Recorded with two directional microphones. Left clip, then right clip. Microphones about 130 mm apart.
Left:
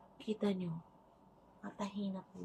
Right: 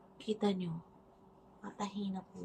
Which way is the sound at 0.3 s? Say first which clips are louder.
Right 3 dB; 25° right (ahead or behind).